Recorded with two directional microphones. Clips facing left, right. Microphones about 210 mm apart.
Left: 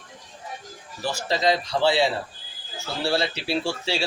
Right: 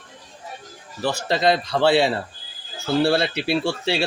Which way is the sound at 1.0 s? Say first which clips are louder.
Right 3 dB; 60° right (ahead or behind).